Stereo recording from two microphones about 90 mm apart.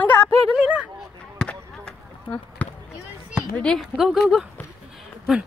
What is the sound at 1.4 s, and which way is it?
Basketball bounce, 10° left (ahead or behind).